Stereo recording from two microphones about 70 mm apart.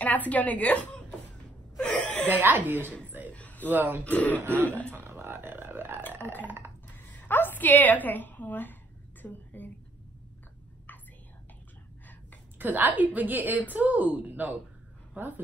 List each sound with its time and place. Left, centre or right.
0.0 s a woman's voice: left
1.8 s chuckle: centre
2.2 s a woman's voice: right
3.3 s a sound: left
3.7 s a woman's voice: right
4.0 s speech: left
4.9 s a sound: right
7.1 s a woman's voice: left
9.2 s whispering: left
12.5 s a woman's voice: right